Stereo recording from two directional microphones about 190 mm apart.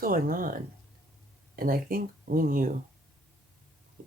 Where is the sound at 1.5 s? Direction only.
50° right (ahead or behind).